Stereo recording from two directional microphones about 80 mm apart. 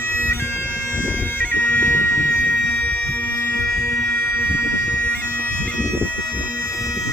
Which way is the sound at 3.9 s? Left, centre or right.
Left.